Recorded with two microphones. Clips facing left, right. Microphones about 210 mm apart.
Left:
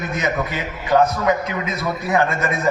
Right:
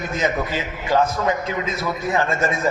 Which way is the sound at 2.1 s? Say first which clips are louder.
Left 2 dB; 25° right (ahead or behind).